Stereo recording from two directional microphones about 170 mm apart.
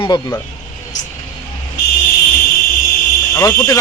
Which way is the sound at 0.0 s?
25° left (ahead or behind).